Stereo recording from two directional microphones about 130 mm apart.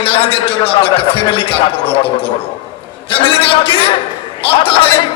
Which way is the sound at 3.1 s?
45° left (ahead or behind).